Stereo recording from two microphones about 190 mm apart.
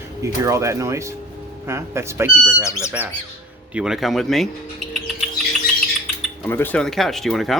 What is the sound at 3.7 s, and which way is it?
Speech, 5° right (ahead or behind).